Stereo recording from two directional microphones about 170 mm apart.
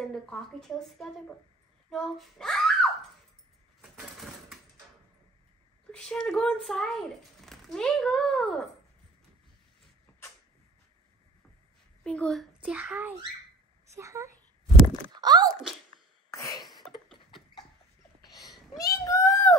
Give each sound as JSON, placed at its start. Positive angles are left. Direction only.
{"t": 0.1, "sound": "a child's voice", "side_deg": 5}
{"t": 3.8, "sound": "a sound", "side_deg": 0}
{"t": 5.9, "sound": "a child's voice", "side_deg": 5}
{"t": 12.0, "sound": "a child's voice", "side_deg": 5}
{"t": 12.6, "sound": "a child's voice", "side_deg": -10}
{"t": 16.3, "sound": "sneeze", "side_deg": 20}
{"t": 18.8, "sound": "child singing", "side_deg": 20}